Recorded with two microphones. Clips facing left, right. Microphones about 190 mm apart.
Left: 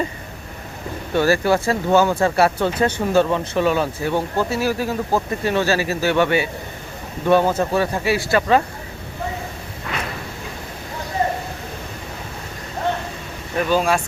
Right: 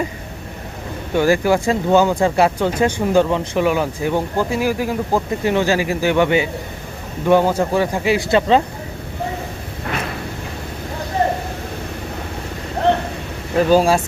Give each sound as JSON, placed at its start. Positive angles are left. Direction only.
{"t": 1.1, "sound": "speech", "side_deg": -15}
{"t": 13.6, "sound": "speech", "side_deg": -35}